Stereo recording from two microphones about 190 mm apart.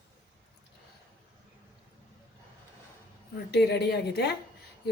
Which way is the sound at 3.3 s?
60° left (ahead or behind).